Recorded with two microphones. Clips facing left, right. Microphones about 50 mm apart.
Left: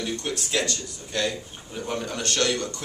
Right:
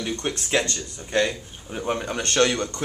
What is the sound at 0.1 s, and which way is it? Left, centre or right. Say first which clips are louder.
Speech: right 6 dB; right.